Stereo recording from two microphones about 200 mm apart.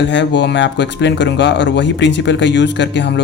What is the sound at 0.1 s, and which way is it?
Speech, 60° left (ahead or behind).